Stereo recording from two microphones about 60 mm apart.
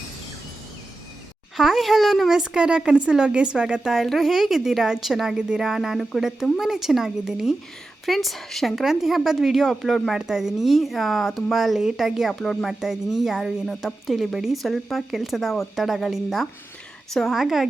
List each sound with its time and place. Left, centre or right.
1.5 s a woman's voice: centre
2.4 s speech: centre
3.9 s a woman's voice: centre